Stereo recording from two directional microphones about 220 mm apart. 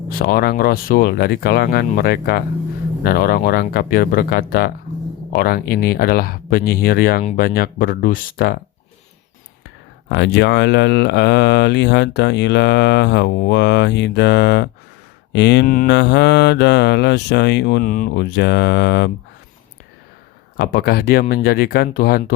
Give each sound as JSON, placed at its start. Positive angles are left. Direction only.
{"t": 0.1, "sound": "speech", "side_deg": 45}
{"t": 10.1, "sound": "speech", "side_deg": 50}
{"t": 20.6, "sound": "speech", "side_deg": 45}